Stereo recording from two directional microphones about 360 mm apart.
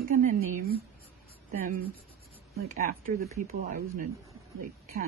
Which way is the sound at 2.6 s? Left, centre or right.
Right.